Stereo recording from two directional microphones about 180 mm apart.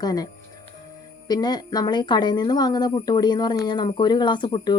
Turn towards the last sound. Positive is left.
turn(degrees=25)  # may be behind; listen again after turning